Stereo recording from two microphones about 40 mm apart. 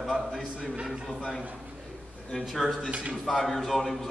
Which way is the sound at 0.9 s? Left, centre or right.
Centre.